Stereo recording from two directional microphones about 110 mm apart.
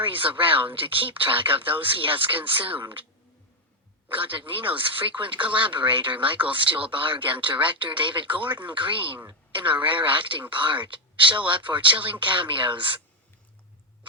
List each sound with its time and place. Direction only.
0.0 s speech: 50° right (ahead or behind)
4.1 s speech: 50° right (ahead or behind)